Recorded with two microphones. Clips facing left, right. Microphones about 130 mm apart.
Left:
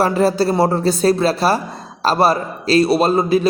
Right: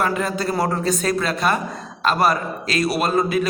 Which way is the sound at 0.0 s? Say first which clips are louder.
Left 7 dB; 35° left (ahead or behind).